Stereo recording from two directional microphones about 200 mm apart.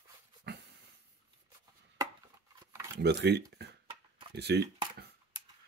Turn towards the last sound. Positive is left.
turn(degrees=-55)  # may be behind; listen again after turning